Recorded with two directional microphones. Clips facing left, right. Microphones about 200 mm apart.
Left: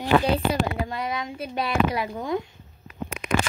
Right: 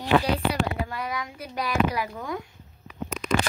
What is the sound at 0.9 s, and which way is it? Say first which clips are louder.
Speech: left 3 dB; 25° left (ahead or behind).